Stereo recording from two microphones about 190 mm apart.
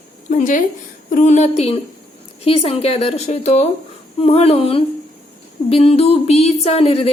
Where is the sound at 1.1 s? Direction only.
40° left (ahead or behind).